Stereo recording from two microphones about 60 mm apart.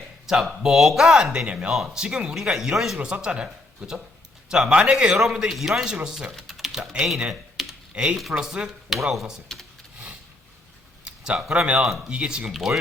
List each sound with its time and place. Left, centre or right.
0.3 s speech: centre
1.7 s speech: centre
11.0 s speech: centre
12.5 s speech: centre